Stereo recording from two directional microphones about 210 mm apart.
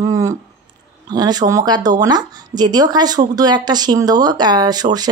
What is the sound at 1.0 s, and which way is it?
Speech, 20° right (ahead or behind).